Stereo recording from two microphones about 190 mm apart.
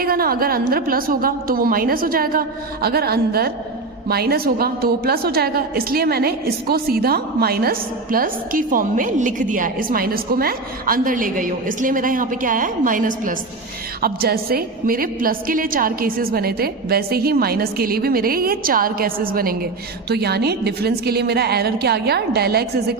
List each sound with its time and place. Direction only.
0.0 s a woman's voice: 50° right (ahead or behind)